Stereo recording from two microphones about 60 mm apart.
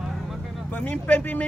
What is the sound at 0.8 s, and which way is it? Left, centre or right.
Speech, left.